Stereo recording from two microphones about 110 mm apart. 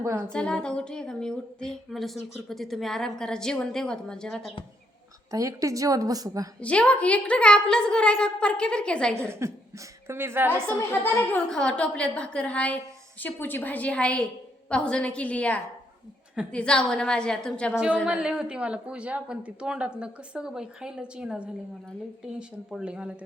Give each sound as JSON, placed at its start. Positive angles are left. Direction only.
{"t": 0.0, "sound": "speech", "side_deg": -25}
{"t": 0.3, "sound": "speech", "side_deg": 10}
{"t": 5.3, "sound": "a woman's voice", "side_deg": -30}
{"t": 6.6, "sound": "a woman's voice", "side_deg": 10}
{"t": 9.3, "sound": "speech", "side_deg": -25}
{"t": 10.8, "sound": "a woman's voice", "side_deg": 20}
{"t": 11.4, "sound": "a woman's voice", "side_deg": 5}
{"t": 18.0, "sound": "a woman's voice", "side_deg": -5}